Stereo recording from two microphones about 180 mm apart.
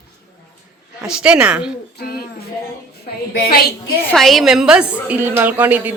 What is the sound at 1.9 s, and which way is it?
Music, 60° left (ahead or behind).